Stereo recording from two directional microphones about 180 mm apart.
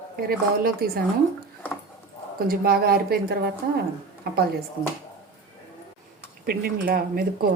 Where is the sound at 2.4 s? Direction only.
55° right (ahead or behind).